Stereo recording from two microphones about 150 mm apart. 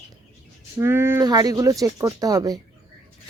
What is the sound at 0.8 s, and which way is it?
A woman's voice, 15° right (ahead or behind).